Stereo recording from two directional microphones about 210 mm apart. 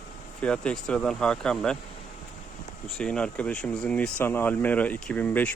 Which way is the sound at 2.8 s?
Centre (ahead or behind).